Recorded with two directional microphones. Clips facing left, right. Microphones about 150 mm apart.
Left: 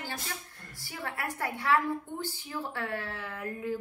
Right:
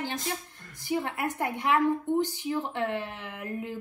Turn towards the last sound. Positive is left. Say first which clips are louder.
# right 1 dB
turn(degrees=-20)  # may be behind; listen again after turning